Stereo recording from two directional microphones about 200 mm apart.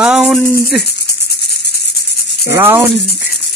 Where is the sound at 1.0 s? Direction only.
55° left (ahead or behind).